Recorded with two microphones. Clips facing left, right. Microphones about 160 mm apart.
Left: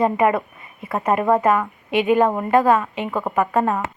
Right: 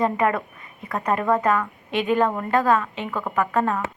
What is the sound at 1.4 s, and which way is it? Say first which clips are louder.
A woman's voice: left 3 dB; 10° left (ahead or behind).